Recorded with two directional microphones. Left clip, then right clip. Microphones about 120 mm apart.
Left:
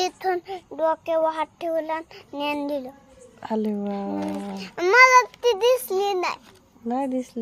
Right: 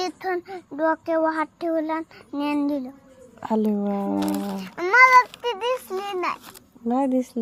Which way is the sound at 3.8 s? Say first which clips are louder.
Right 3 dB; 20° left (ahead or behind).